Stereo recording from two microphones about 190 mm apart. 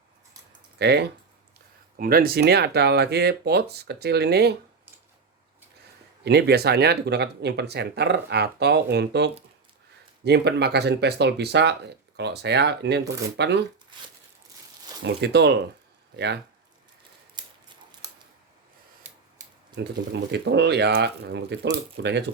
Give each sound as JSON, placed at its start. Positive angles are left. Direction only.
{"t": 0.8, "sound": "speech", "side_deg": -60}
{"t": 2.0, "sound": "speech", "side_deg": -50}
{"t": 6.2, "sound": "speech", "side_deg": -60}
{"t": 15.0, "sound": "speech", "side_deg": -60}
{"t": 20.3, "sound": "speech", "side_deg": -60}